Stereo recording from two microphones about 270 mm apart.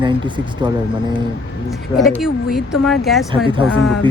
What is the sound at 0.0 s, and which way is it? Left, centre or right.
Speech, centre.